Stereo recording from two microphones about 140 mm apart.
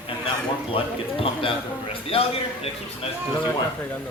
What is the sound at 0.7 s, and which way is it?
A man's voice, 40° left (ahead or behind).